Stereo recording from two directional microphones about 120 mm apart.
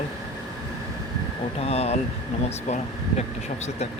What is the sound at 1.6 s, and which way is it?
Speech, 60° left (ahead or behind).